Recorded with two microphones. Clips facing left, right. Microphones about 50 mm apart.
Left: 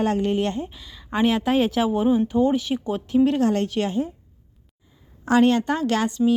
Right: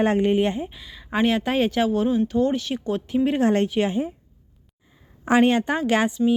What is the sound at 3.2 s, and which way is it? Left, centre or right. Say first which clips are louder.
Speech: left 3 dB; centre.